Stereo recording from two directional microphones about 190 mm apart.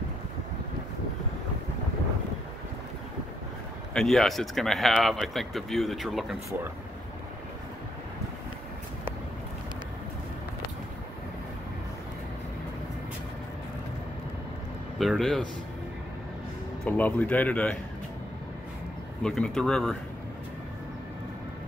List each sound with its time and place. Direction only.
3.9 s speech: centre (ahead or behind)
15.0 s speech: centre (ahead or behind)
16.8 s speech: 10° left (ahead or behind)
19.2 s speech: 5° left (ahead or behind)